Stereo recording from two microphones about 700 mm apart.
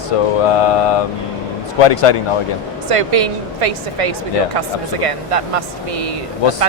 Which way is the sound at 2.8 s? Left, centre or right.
Right.